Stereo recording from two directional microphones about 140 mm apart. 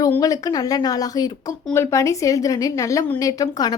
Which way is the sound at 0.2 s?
25° left (ahead or behind).